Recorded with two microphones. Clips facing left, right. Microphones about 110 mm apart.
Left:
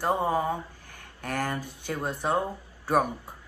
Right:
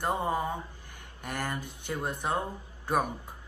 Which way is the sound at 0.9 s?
15° right (ahead or behind).